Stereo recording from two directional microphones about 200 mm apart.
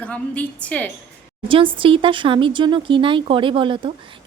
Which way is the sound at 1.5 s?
25° right (ahead or behind).